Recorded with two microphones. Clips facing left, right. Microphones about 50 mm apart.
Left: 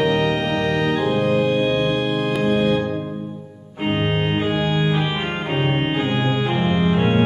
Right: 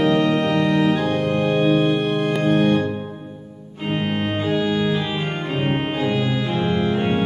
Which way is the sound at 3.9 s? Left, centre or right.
Left.